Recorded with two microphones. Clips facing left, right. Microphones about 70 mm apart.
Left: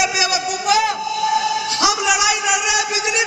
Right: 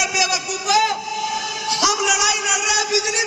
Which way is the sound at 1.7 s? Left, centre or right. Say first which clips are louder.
Right 1 dB; left.